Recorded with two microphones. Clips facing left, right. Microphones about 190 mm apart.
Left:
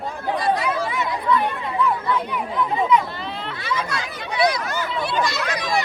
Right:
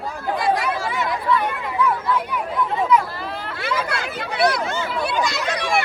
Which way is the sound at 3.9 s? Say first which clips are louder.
Right 2 dB; 60° right (ahead or behind).